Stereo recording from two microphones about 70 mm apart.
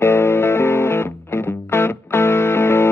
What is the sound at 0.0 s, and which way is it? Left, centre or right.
Music, left.